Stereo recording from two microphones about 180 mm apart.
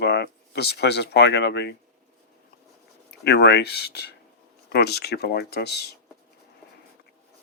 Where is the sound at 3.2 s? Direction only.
65° left (ahead or behind).